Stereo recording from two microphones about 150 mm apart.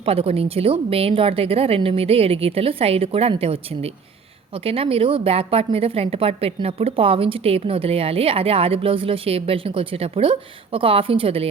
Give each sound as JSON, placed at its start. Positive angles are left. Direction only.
{"t": 0.0, "sound": "a woman's voice", "side_deg": -40}